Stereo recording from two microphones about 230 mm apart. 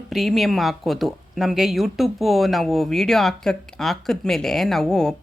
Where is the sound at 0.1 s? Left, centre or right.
Centre.